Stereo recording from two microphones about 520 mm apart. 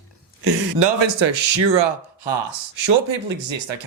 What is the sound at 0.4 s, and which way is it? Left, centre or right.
Speech, right.